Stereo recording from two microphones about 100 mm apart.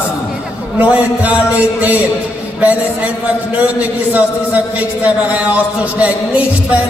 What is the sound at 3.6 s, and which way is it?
Speech, 15° right (ahead or behind).